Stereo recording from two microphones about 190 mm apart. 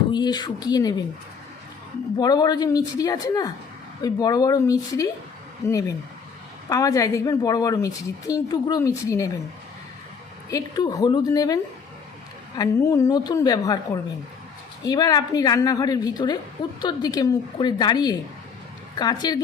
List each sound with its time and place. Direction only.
0.1 s a woman's voice: 20° left (ahead or behind)
2.1 s a woman's voice: 20° left (ahead or behind)
10.5 s a woman's voice: 20° left (ahead or behind)